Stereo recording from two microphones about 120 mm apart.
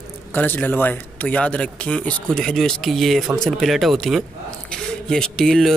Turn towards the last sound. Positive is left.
turn(degrees=5)  # may be behind; listen again after turning